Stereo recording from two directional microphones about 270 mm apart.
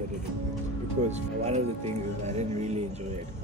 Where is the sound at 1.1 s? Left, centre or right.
Right.